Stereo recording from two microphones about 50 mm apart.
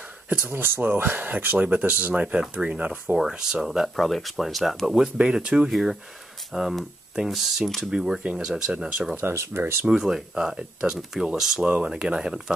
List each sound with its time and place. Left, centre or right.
0.5 s speech: right
3.2 s speech: centre
3.6 s speech: centre
4.8 s speech: centre
5.7 s speech: centre
8.7 s speech: right
9.1 s speech: right
9.8 s speech: centre